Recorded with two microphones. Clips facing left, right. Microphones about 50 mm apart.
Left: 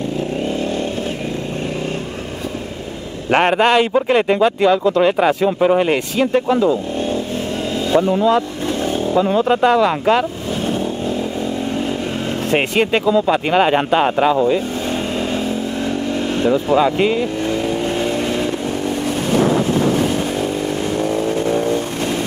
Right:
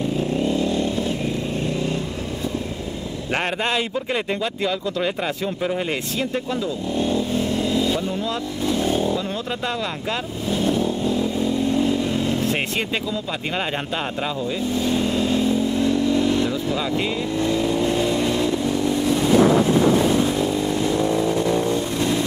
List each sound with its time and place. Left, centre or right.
3.3 s speech: left
4.8 s speech: left
6.6 s speech: left
8.0 s speech: left
9.1 s speech: left
9.7 s speech: left
12.4 s speech: left
14.5 s vehicle: left
17.5 s vehicle: left
21.1 s vehicle: left